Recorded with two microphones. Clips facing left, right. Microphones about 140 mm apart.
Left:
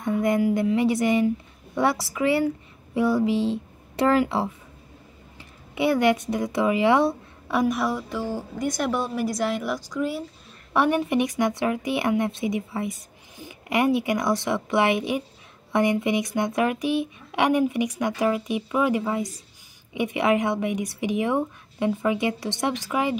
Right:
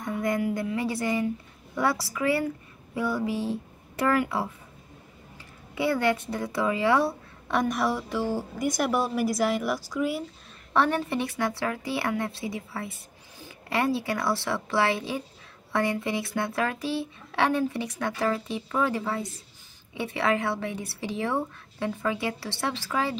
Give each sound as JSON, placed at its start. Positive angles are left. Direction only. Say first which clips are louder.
{"t": 0.0, "sound": "a child's voice", "louder": "left 5 dB", "side_deg": 20}
{"t": 5.8, "sound": "a child's voice", "louder": "left 4 dB", "side_deg": 20}
{"t": 7.4, "sound": "a woman's voice", "louder": "left 2 dB", "side_deg": 5}
{"t": 10.7, "sound": "a woman's voice", "louder": "left 3 dB", "side_deg": 15}